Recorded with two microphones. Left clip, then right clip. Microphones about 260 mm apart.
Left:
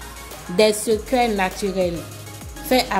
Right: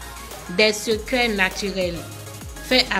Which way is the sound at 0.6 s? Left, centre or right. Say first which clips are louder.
Left 2 dB; centre.